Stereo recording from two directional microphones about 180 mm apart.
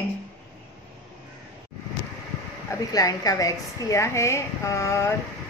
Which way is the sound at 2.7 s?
20° left (ahead or behind).